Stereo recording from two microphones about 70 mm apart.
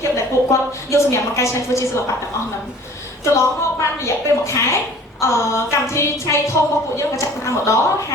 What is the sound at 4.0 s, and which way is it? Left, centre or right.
A woman's voice, left.